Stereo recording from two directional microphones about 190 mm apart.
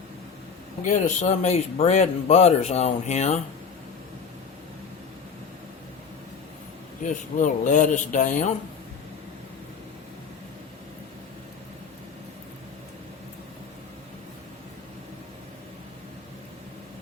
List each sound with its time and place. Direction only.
0.9 s speech: 40° left (ahead or behind)
7.0 s speech: 40° left (ahead or behind)